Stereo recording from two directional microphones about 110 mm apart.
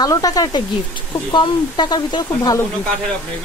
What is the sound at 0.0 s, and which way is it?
Speech, 35° left (ahead or behind).